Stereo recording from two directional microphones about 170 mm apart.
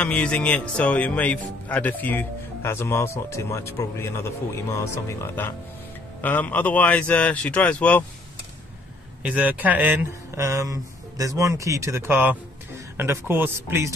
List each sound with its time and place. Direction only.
0.0 s speech: 5° left (ahead or behind)
9.2 s speech: 10° right (ahead or behind)